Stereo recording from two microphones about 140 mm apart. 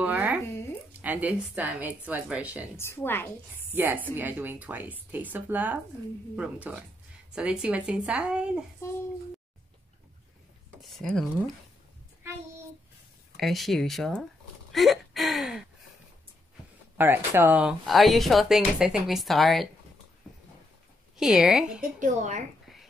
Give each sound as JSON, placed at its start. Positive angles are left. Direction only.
{"t": 0.0, "sound": "a sound", "side_deg": -10}
{"t": 1.0, "sound": "a woman's voice", "side_deg": -10}
{"t": 2.8, "sound": "a woman's voice", "side_deg": 15}
{"t": 3.7, "sound": "a woman's voice", "side_deg": -15}
{"t": 10.8, "sound": "speech", "side_deg": 0}
{"t": 13.4, "sound": "speech", "side_deg": 0}
{"t": 17.0, "sound": "speech", "side_deg": -15}
{"t": 21.2, "sound": "speech", "side_deg": -5}
{"t": 22.0, "sound": "speech", "side_deg": -60}